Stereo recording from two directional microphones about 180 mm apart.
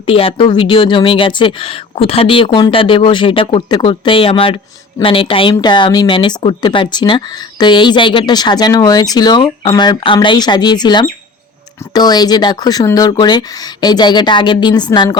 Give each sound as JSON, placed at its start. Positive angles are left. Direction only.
{"t": 0.0, "sound": "a woman's voice", "side_deg": 30}